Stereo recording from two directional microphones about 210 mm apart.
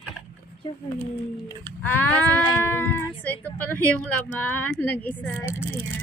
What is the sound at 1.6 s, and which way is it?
A woman's voice, 10° left (ahead or behind).